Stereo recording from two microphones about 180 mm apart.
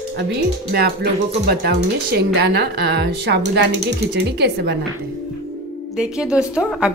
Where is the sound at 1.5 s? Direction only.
60° right (ahead or behind).